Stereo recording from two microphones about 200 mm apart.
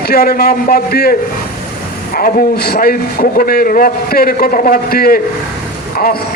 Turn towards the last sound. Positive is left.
turn(degrees=50)  # may be behind; listen again after turning